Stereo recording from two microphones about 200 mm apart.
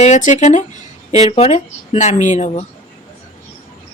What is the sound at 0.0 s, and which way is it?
Speech, 35° left (ahead or behind).